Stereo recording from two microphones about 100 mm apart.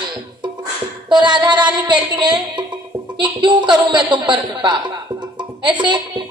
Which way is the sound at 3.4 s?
50° right (ahead or behind).